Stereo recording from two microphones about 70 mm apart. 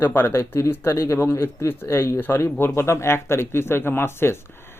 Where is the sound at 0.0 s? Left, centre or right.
Left.